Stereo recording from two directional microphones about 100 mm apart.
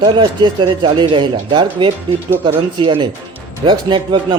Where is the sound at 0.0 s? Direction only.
50° right (ahead or behind).